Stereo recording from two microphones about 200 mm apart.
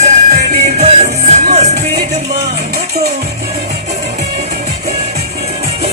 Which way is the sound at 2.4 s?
55° right (ahead or behind).